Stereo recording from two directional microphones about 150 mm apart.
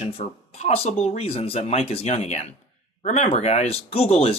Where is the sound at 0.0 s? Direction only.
45° left (ahead or behind).